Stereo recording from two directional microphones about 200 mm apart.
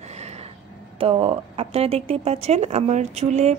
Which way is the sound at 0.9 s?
30° right (ahead or behind).